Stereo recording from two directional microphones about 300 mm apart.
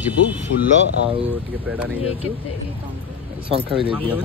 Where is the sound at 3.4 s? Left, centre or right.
Centre.